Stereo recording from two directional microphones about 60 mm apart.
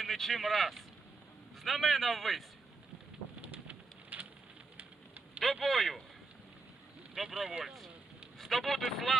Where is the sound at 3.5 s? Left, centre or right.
Right.